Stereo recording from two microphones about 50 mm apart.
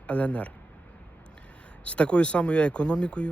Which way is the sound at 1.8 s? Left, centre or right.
Left.